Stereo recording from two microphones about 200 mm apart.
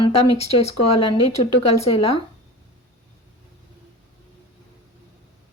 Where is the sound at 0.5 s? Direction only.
30° left (ahead or behind).